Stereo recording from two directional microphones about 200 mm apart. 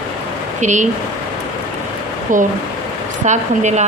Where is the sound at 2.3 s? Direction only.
40° right (ahead or behind).